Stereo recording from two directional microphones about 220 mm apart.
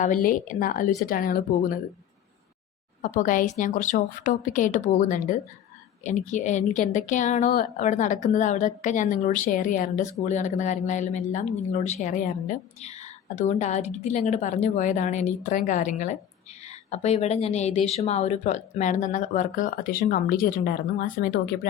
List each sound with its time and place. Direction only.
0.0 s a woman's voice: 40° left (ahead or behind)
3.0 s a woman's voice: 35° left (ahead or behind)